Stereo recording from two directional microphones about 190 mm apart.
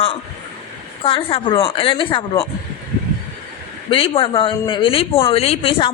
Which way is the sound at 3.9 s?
30° left (ahead or behind).